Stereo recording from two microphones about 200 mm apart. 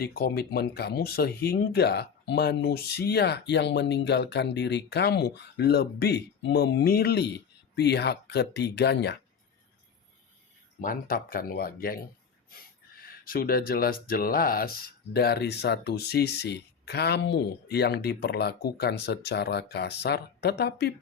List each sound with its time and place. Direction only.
0.0 s speech: 50° left (ahead or behind)
10.8 s speech: 45° left (ahead or behind)